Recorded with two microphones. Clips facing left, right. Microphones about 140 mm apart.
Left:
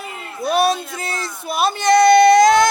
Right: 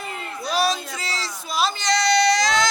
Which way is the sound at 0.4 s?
55° left (ahead or behind).